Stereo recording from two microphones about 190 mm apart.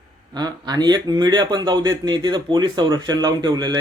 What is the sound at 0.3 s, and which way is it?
Speech, 20° right (ahead or behind).